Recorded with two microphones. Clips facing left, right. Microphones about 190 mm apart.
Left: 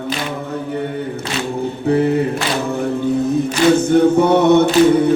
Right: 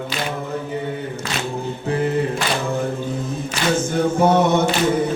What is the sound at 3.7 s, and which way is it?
Mantra, 60° left (ahead or behind).